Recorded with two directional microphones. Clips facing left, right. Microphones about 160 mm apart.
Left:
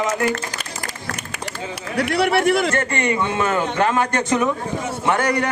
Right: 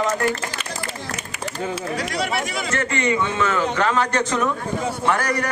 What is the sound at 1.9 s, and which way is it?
Speech, 60° left (ahead or behind).